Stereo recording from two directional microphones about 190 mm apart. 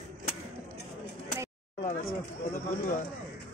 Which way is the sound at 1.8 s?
50° left (ahead or behind).